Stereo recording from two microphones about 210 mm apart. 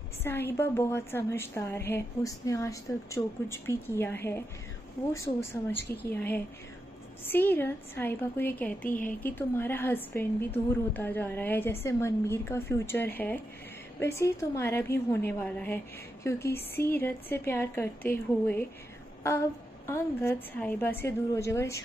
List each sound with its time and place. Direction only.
0.2 s a woman's voice: 10° left (ahead or behind)
8.8 s a woman's voice: 40° left (ahead or behind)
9.2 s a woman's voice: 10° left (ahead or behind)
19.9 s a woman's voice: 10° left (ahead or behind)